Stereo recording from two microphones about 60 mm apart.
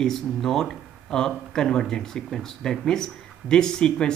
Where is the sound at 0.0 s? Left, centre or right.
Centre.